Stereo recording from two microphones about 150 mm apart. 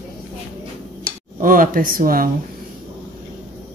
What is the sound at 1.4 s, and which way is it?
Speech, 65° right (ahead or behind).